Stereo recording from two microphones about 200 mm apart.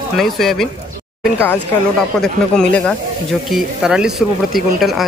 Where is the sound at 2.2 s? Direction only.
5° left (ahead or behind).